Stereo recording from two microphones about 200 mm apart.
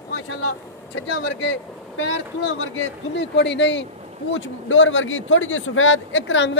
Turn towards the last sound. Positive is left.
turn(degrees=65)  # may be behind; listen again after turning